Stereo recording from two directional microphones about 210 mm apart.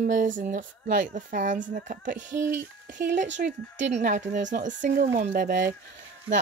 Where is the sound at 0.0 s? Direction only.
40° right (ahead or behind).